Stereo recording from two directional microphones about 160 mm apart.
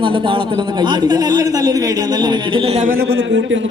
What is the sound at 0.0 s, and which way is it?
A man's voice, 30° right (ahead or behind).